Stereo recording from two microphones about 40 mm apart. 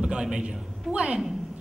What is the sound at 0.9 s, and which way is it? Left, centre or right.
Speech, right.